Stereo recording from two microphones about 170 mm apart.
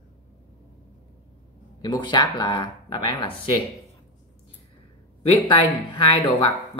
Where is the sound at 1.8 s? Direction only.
25° left (ahead or behind).